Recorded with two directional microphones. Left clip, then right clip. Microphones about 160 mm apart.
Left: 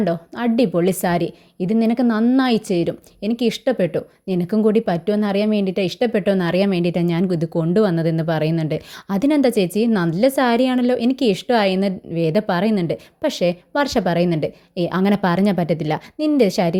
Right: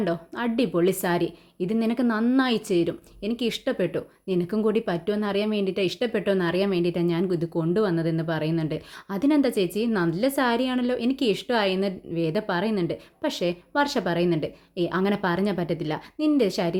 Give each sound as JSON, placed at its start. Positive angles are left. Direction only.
{"t": 0.0, "sound": "a woman's voice", "side_deg": 35}